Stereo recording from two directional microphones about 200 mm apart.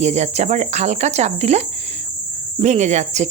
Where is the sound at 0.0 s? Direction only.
35° right (ahead or behind).